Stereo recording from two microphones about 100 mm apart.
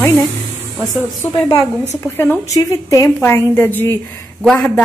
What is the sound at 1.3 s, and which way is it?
Speech, 45° left (ahead or behind).